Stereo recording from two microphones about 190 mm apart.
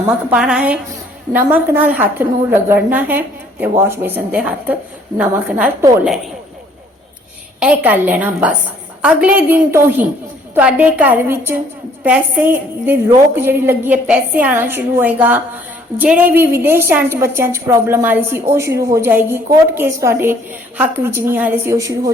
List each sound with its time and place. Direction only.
0.3 s a woman's voice: 5° right (ahead or behind)
7.6 s a woman's voice: 10° right (ahead or behind)